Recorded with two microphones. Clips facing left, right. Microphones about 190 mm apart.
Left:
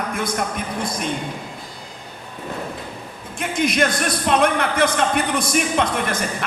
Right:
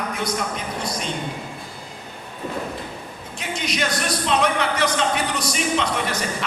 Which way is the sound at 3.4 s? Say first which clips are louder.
Left 6 dB; 55° left (ahead or behind).